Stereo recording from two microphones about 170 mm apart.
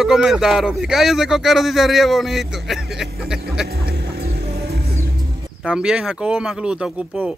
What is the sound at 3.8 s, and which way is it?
Music, 65° right (ahead or behind).